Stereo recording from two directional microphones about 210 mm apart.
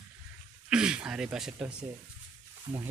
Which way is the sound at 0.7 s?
5° right (ahead or behind).